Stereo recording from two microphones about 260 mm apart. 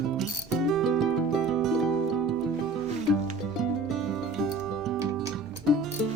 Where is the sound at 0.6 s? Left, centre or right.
Centre.